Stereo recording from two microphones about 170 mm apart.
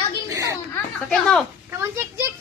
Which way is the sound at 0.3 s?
20° right (ahead or behind).